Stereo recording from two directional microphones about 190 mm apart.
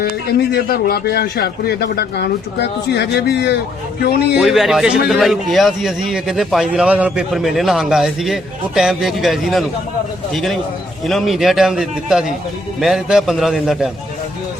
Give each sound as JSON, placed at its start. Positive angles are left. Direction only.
{"t": 0.0, "sound": "speech", "side_deg": 55}
{"t": 4.4, "sound": "a man's voice", "side_deg": 0}